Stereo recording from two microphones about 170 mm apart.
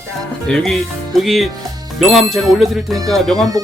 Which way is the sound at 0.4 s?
5° left (ahead or behind).